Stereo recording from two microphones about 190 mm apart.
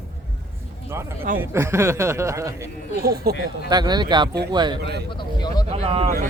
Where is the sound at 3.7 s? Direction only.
20° right (ahead or behind).